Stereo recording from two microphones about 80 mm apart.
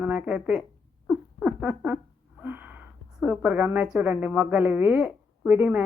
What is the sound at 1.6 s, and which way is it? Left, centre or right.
Speech, right.